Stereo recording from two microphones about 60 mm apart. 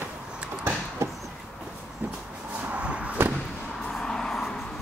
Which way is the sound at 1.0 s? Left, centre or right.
Right.